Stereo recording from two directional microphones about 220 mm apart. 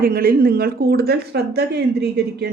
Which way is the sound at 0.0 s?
40° right (ahead or behind).